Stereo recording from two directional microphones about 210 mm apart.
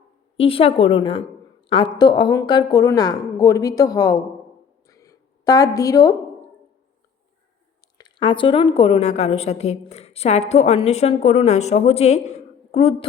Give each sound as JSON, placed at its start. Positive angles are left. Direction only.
{"t": 0.3, "sound": "a woman's voice", "side_deg": 25}
{"t": 4.9, "sound": "a sound", "side_deg": 15}
{"t": 7.9, "sound": "a woman's voice", "side_deg": 20}